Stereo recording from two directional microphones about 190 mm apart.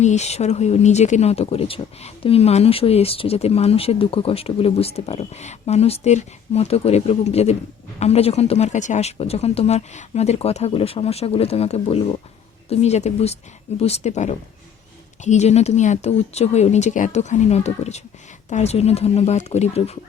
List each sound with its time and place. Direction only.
0.0 s speech: 35° left (ahead or behind)